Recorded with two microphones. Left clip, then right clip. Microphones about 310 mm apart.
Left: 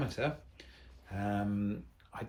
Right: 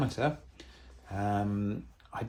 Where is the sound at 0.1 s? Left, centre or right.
Centre.